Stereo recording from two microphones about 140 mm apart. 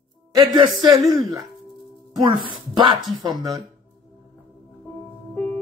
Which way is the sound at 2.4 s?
35° right (ahead or behind).